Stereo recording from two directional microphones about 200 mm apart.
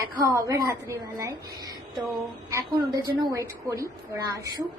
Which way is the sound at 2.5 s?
15° right (ahead or behind).